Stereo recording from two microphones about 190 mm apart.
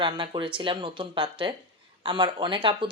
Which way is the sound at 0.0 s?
25° right (ahead or behind).